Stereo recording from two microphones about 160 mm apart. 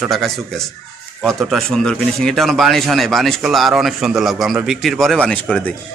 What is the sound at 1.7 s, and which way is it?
A man's voice, 5° left (ahead or behind).